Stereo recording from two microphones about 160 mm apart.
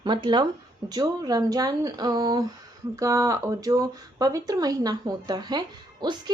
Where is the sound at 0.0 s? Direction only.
30° right (ahead or behind).